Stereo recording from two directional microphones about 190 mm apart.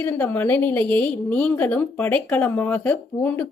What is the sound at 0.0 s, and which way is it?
A woman's voice, 10° left (ahead or behind).